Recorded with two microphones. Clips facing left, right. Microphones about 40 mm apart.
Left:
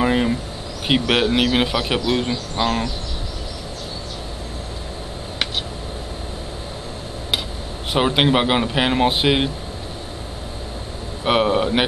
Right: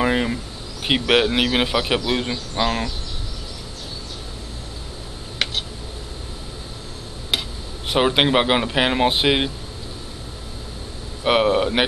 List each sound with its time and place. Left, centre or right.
0.0 s insect: centre
0.8 s a man's voice: centre
7.9 s a man's voice: centre
11.2 s a man's voice: centre